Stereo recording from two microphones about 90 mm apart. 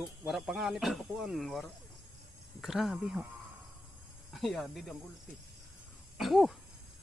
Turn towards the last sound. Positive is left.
turn(degrees=0)  # may be behind; listen again after turning